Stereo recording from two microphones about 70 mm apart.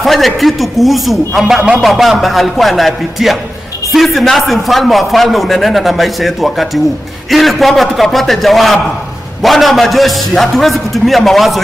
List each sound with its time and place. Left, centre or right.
0.0 s speech: centre